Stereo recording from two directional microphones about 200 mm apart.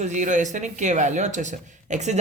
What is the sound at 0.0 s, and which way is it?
Speech, 35° right (ahead or behind).